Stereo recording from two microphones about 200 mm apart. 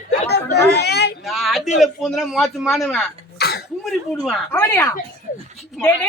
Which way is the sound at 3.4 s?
55° left (ahead or behind).